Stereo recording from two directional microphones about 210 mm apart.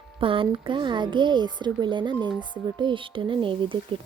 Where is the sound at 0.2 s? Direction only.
25° right (ahead or behind).